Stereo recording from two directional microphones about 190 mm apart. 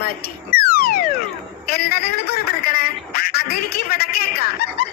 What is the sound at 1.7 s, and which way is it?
Quack, 55° left (ahead or behind).